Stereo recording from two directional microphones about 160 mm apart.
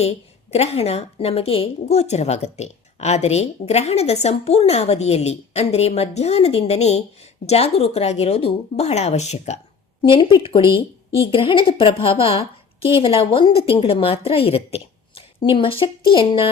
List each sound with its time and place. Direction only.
0.5 s speech: 40° left (ahead or behind)
10.0 s speech: 30° left (ahead or behind)